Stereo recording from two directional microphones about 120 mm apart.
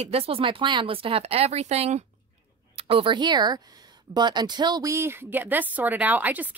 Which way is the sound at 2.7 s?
50° right (ahead or behind).